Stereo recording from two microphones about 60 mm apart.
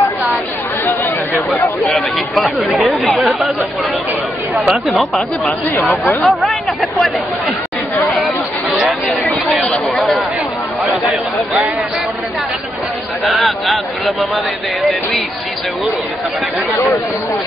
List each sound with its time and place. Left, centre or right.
2.0 s speech: centre
4.6 s speech: centre
6.2 s speech: centre
9.6 s chatter: centre
13.2 s speech: centre